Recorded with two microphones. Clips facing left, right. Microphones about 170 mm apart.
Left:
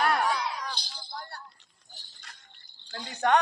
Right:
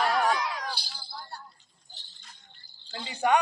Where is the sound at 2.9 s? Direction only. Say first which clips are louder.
Even; 10° right (ahead or behind).